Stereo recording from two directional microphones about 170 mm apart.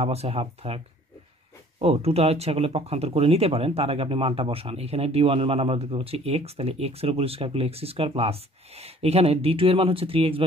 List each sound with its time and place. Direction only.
0.0 s speech: 35° right (ahead or behind)